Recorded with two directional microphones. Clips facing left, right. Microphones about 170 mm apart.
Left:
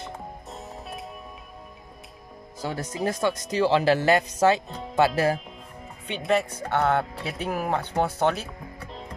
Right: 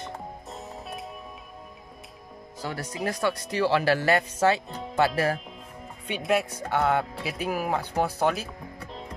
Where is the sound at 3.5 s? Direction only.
20° left (ahead or behind).